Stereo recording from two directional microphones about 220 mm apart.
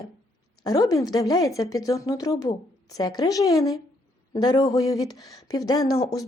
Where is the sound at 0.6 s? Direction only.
15° left (ahead or behind).